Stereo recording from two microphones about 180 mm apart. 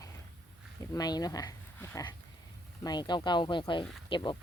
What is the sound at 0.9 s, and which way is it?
Speech, 20° left (ahead or behind).